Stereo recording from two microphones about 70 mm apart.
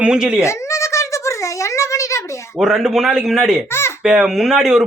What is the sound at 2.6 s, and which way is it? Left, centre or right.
A man's voice, centre.